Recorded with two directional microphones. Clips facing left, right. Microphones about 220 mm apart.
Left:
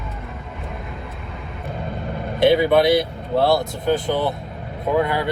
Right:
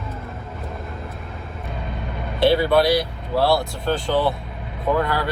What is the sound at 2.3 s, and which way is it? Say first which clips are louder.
Speech: left 2 dB; 20° left (ahead or behind).